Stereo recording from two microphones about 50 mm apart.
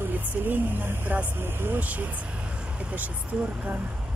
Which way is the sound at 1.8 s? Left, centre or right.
Right.